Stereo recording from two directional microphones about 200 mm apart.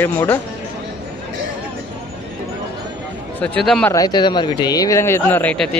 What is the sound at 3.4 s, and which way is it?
Speech, 5° left (ahead or behind).